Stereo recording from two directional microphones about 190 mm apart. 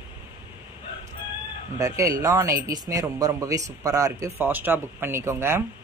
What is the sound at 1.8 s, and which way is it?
Speech, 15° right (ahead or behind).